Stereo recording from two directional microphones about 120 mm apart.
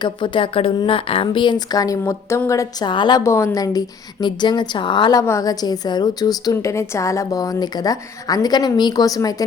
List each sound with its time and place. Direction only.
0.0 s a woman's voice: 40° left (ahead or behind)
3.2 s a woman's voice: 25° left (ahead or behind); by 5.2 s 40° left (ahead or behind)
5.2 s a woman's voice: 25° left (ahead or behind)